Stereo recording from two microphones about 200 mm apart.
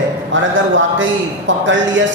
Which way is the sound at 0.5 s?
70° right (ahead or behind).